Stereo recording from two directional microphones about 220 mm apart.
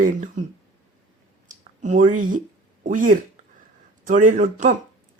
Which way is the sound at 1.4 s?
35° right (ahead or behind).